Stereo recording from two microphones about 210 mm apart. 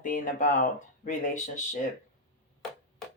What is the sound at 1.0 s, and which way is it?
Speech, 35° left (ahead or behind).